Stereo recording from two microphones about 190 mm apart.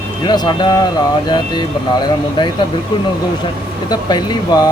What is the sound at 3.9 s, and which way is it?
Speech, 20° left (ahead or behind).